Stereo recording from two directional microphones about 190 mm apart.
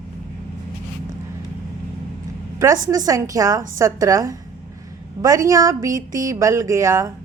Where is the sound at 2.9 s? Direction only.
20° right (ahead or behind).